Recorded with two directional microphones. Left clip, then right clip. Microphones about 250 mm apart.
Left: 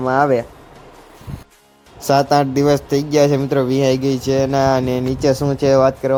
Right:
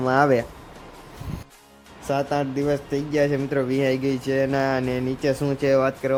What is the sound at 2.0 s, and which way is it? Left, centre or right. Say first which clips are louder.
Speech: left 10 dB; left.